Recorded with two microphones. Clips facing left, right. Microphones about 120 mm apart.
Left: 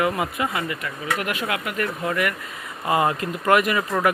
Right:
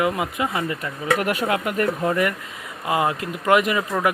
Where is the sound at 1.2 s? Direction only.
40° right (ahead or behind).